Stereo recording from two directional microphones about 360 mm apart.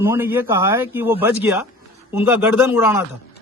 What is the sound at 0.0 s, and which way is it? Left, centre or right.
A man's voice, centre.